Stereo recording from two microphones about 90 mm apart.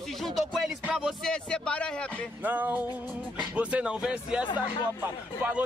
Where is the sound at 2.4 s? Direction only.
20° right (ahead or behind).